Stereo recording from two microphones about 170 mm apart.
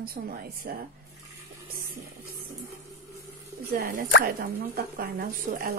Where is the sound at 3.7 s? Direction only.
65° right (ahead or behind).